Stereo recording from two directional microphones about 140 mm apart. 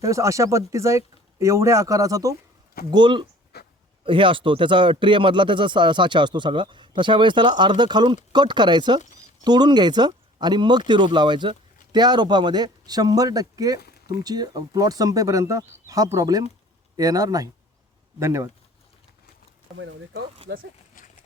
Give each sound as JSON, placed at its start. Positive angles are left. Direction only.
{"t": 0.0, "sound": "speech", "side_deg": -20}